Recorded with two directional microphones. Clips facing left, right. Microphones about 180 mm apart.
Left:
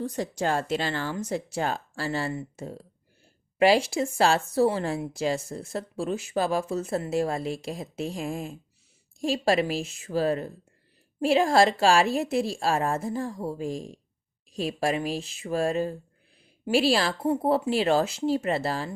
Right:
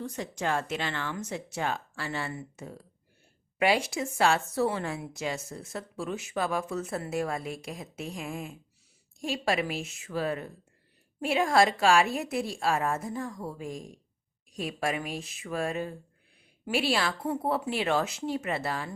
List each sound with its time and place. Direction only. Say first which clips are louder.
0.0 s a woman's voice: left 5 dB; 35° left (ahead or behind)